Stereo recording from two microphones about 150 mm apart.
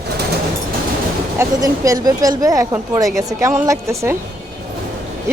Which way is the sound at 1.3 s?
20° right (ahead or behind).